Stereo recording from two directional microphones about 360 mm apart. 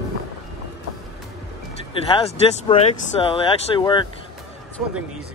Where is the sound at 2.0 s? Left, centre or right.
Centre.